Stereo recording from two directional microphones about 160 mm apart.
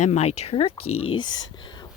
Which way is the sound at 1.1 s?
25° left (ahead or behind).